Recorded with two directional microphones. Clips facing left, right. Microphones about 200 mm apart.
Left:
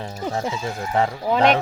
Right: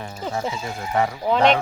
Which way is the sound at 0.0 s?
30° left (ahead or behind).